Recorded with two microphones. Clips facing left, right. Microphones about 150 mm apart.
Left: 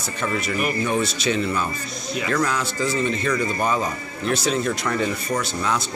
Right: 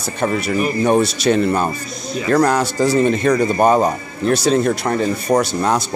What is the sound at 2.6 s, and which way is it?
Speech, 75° right (ahead or behind).